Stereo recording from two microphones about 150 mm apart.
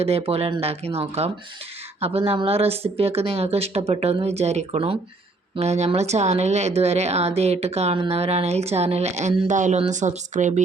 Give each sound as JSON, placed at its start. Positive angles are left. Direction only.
{"t": 0.0, "sound": "speech", "side_deg": -40}